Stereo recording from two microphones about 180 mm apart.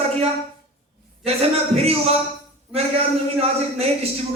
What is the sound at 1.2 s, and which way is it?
Speech, 35° right (ahead or behind).